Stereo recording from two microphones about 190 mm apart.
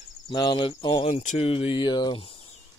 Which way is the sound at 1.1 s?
40° left (ahead or behind).